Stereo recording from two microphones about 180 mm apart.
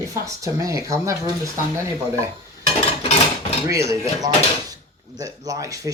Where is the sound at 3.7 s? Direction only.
15° right (ahead or behind).